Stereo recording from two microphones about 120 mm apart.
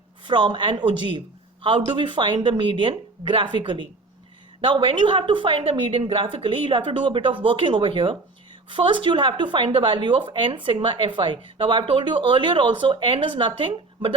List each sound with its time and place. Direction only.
0.3 s speech: 40° right (ahead or behind)